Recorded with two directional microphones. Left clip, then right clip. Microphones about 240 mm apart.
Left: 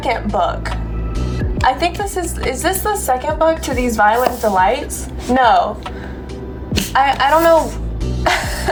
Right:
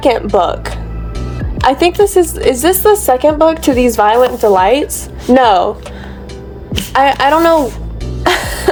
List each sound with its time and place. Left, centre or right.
0.0 s a woman's voice: right
6.9 s a woman's voice: right
8.2 s music: right